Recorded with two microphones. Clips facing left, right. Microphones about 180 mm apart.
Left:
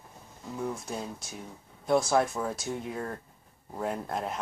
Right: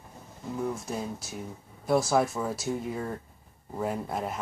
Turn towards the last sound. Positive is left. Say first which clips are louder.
# right 1 dB
turn(degrees=-5)  # may be behind; listen again after turning